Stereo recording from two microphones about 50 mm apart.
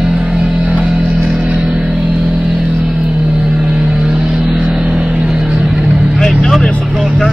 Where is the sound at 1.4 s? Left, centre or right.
Right.